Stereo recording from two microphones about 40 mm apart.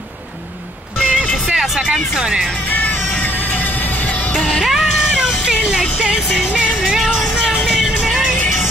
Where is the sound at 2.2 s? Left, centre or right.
Centre.